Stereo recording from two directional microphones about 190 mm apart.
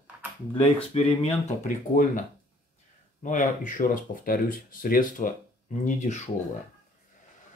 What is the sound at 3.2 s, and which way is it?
Speech, 40° left (ahead or behind).